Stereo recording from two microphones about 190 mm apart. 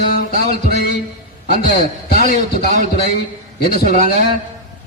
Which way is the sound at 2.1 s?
50° left (ahead or behind).